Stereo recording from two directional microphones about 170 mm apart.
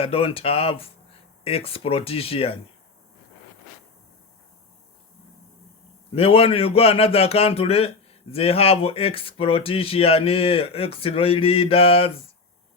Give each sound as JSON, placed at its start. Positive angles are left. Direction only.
{"t": 0.0, "sound": "speech", "side_deg": 35}
{"t": 6.1, "sound": "speech", "side_deg": 35}